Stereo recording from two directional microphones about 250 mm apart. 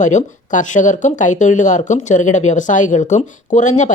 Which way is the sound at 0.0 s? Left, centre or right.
Left.